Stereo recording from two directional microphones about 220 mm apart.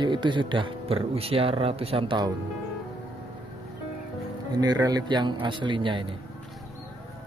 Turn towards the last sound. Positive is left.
turn(degrees=-20)  # may be behind; listen again after turning